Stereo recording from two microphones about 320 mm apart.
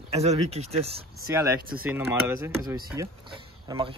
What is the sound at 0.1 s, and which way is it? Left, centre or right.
Speech, centre.